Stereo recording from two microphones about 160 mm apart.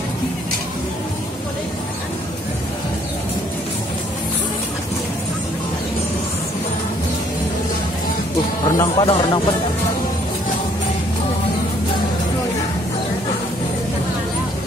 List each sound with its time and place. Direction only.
8.6 s speech: 20° left (ahead or behind)